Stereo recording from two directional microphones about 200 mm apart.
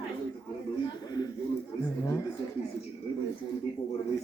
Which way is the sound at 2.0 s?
15° left (ahead or behind).